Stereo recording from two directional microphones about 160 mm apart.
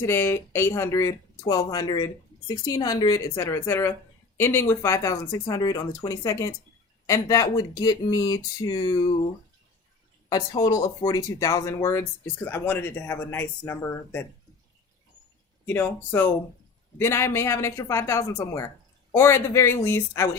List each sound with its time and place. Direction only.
0.0 s speech: 15° left (ahead or behind)
10.2 s speech: 25° left (ahead or behind)
15.6 s speech: 10° left (ahead or behind)